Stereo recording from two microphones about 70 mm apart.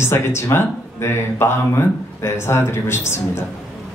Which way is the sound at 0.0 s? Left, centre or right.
Left.